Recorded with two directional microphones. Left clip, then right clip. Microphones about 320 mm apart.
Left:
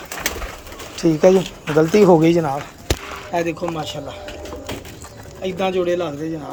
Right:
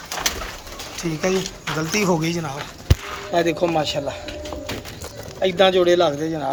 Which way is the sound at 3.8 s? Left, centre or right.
Left.